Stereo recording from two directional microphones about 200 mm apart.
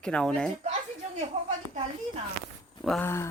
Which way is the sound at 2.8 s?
Centre (ahead or behind).